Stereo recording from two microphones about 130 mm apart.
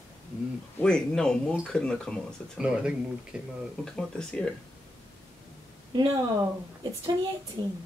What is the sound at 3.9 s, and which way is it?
Speech, 5° left (ahead or behind).